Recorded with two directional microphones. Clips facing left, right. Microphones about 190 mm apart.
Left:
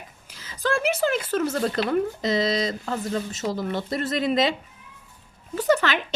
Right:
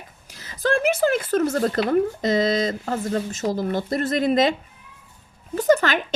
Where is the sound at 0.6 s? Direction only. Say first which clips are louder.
Right 3 dB; 50° right (ahead or behind).